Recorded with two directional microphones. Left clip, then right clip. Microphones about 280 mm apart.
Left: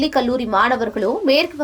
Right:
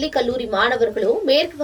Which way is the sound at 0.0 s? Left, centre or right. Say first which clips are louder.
Left 2 dB; centre.